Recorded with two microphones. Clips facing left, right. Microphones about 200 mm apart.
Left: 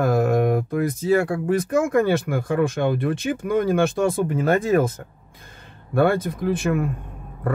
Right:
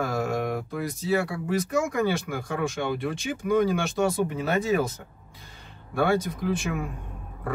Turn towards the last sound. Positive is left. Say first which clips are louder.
# left 6 dB
turn(degrees=55)  # may be behind; listen again after turning